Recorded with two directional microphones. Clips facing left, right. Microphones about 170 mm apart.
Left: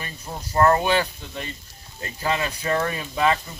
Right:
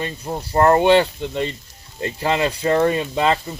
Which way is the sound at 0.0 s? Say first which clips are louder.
Right 8 dB; 30° right (ahead or behind).